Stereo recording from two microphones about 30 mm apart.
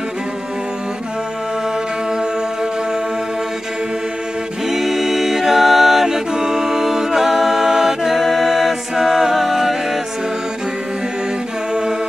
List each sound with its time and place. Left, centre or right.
2.0 s music: right
4.6 s a capella: centre
6.0 s a capella: centre